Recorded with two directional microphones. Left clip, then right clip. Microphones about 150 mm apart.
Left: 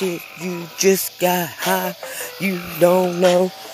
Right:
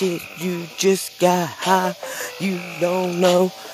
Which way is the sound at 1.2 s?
25° right (ahead or behind).